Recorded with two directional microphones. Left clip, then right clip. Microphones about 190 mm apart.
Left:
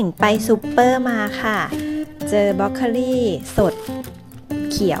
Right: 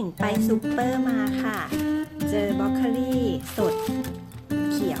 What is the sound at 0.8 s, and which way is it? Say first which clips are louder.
Speech: left 9 dB; 45° left (ahead or behind).